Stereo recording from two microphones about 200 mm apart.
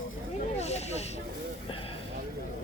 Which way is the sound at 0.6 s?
35° left (ahead or behind).